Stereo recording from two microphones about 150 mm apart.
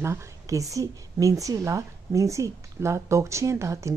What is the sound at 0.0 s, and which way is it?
A woman's voice, 20° right (ahead or behind).